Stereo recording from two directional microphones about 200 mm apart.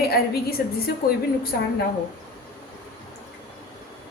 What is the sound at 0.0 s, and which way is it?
Speech, 50° left (ahead or behind).